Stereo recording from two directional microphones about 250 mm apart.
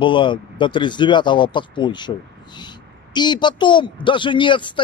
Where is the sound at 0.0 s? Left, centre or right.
Centre.